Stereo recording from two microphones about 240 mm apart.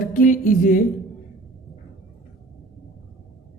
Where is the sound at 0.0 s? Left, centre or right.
Left.